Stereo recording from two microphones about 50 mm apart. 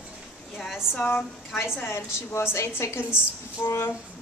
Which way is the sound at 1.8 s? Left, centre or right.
Left.